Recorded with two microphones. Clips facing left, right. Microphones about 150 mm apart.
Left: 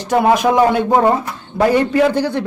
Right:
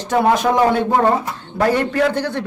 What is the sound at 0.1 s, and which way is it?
A man's voice, 10° left (ahead or behind).